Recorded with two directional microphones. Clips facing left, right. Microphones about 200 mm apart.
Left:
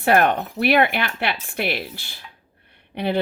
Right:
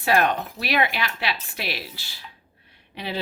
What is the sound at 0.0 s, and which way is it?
Speech, 55° left (ahead or behind).